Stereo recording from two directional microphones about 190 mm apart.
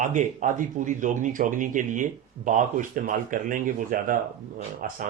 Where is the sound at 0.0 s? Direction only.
40° right (ahead or behind).